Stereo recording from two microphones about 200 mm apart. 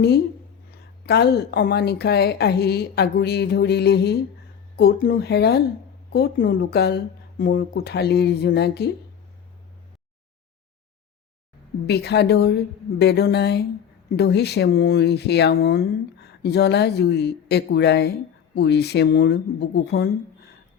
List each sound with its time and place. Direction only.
1.0 s a woman's voice: 55° left (ahead or behind)
11.9 s a woman's voice: 55° left (ahead or behind)